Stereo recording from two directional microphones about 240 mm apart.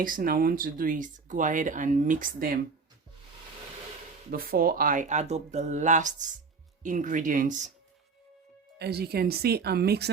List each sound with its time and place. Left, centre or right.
0.0 s speech: right
4.3 s speech: right
8.8 s speech: right